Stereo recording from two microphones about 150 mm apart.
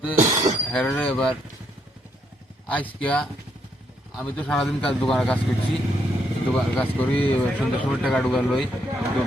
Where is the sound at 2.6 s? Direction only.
10° left (ahead or behind).